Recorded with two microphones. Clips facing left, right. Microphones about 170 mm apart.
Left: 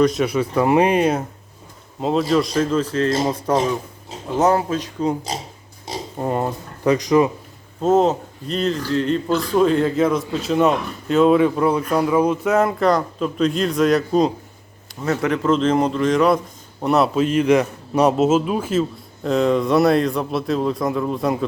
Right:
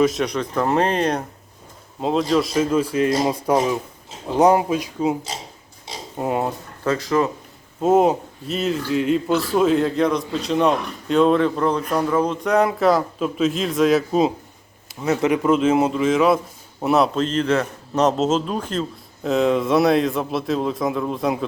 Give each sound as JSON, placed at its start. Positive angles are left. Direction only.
{"t": 0.0, "sound": "a man's voice", "side_deg": 0}
{"t": 6.1, "sound": "speech", "side_deg": -5}
{"t": 6.8, "sound": "speech", "side_deg": 15}
{"t": 7.8, "sound": "speech", "side_deg": -10}
{"t": 15.0, "sound": "a man's voice", "side_deg": -20}